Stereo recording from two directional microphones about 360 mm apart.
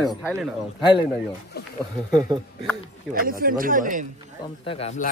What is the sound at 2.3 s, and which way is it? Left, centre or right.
Speech, centre.